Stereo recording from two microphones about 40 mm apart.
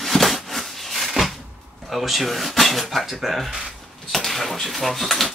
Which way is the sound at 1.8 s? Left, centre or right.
Centre.